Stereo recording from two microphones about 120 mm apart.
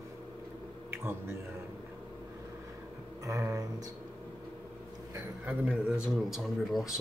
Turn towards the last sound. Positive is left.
turn(degrees=0)  # may be behind; listen again after turning